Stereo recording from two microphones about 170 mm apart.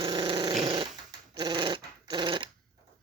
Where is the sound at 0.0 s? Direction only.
25° right (ahead or behind).